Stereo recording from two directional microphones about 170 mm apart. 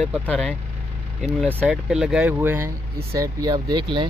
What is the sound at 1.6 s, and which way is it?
Speech, 5° right (ahead or behind).